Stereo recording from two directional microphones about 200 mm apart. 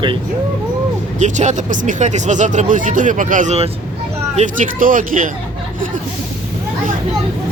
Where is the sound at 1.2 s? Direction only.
35° right (ahead or behind).